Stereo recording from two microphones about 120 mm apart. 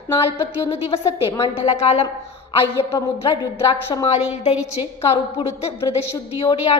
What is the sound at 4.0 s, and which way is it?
Speech, 65° left (ahead or behind).